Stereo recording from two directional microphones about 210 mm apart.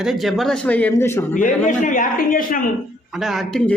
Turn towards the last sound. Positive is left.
turn(degrees=5)  # may be behind; listen again after turning